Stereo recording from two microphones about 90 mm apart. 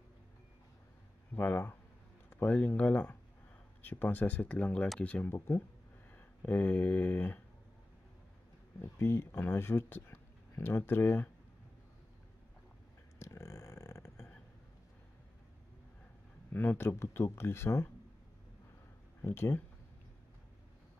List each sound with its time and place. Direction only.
1.3 s speech: 20° left (ahead or behind)
8.8 s speech: 30° left (ahead or behind)
13.2 s a sound: 30° left (ahead or behind)
16.5 s speech: 20° left (ahead or behind)
19.2 s speech: 25° left (ahead or behind)